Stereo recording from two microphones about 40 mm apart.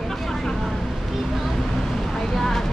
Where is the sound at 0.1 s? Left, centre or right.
Centre.